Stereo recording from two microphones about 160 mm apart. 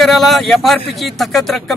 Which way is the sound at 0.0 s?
Centre (ahead or behind).